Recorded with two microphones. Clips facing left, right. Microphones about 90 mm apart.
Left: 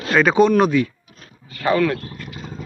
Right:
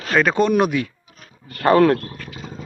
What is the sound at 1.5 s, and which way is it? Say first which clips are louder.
Speech: right 4 dB; 55° right (ahead or behind).